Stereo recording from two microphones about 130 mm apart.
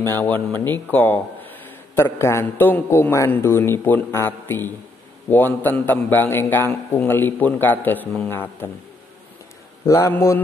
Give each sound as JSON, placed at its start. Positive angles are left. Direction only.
{"t": 0.0, "sound": "a man's voice", "side_deg": 15}
{"t": 9.8, "sound": "a man's voice", "side_deg": 25}